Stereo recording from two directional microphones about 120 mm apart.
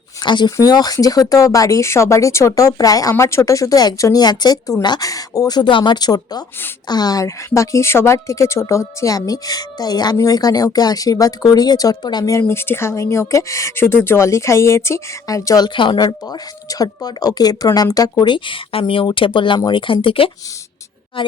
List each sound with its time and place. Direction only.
0.2 s a woman's voice: 40° left (ahead or behind)
12.4 s speech: 20° left (ahead or behind); by 21.3 s 45° left (ahead or behind)